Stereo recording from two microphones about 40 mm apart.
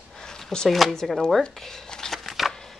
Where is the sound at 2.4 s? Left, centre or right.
Centre.